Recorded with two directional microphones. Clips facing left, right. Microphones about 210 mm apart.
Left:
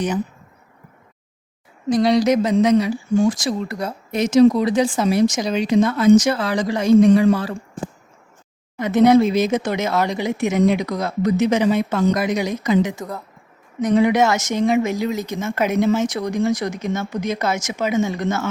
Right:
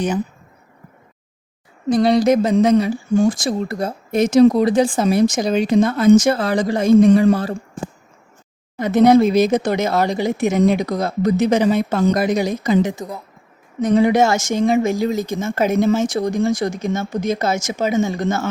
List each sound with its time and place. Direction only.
1.9 s speech: 50° right (ahead or behind)
8.7 s speech: 35° right (ahead or behind)